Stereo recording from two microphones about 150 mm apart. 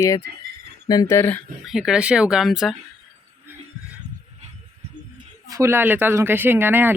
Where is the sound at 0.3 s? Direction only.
90° right.